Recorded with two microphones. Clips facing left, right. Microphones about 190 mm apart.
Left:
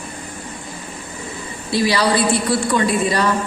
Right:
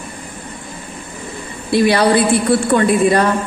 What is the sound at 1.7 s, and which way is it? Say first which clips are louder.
A woman's voice: right 5 dB; 55° right (ahead or behind).